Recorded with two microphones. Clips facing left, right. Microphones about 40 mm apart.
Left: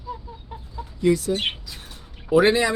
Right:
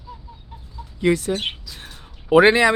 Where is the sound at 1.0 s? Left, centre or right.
Right.